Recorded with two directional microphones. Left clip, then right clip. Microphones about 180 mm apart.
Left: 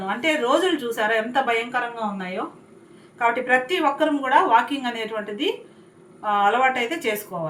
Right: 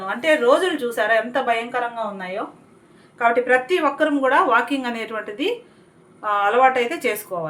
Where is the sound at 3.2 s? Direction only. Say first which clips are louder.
Right 3 dB; 50° right (ahead or behind).